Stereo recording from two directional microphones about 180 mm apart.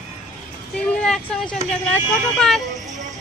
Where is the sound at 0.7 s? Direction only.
5° left (ahead or behind).